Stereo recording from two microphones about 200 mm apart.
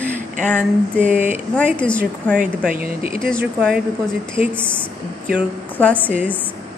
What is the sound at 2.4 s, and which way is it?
Speech, 45° right (ahead or behind).